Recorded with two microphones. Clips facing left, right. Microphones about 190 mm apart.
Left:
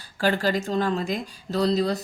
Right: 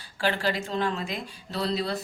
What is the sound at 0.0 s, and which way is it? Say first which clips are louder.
Speech: left 4 dB; 40° left (ahead or behind).